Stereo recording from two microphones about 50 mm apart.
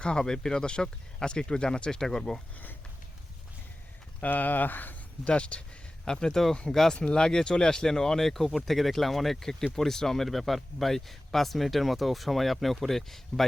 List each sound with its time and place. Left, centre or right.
0.0 s speech: centre
4.2 s speech: left
5.2 s speech: left
6.1 s speech: centre
6.9 s speech: centre